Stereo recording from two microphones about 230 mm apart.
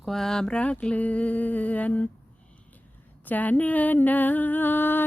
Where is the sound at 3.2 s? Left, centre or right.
Centre.